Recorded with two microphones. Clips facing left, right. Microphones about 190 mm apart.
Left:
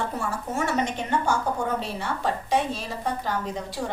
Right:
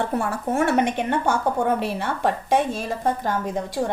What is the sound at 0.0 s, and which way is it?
A woman's voice, 60° right (ahead or behind).